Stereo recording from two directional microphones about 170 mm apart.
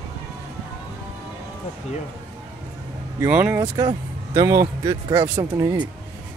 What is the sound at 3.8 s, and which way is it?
Speech, 20° right (ahead or behind).